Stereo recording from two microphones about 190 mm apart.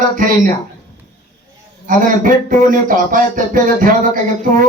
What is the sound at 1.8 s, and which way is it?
Speech, 45° right (ahead or behind).